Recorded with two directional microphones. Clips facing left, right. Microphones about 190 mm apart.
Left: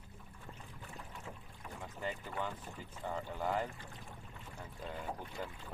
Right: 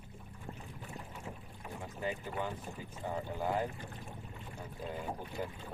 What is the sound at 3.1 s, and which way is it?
Speech, 10° right (ahead or behind).